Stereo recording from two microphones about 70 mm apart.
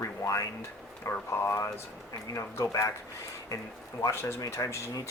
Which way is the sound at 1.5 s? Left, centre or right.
Left.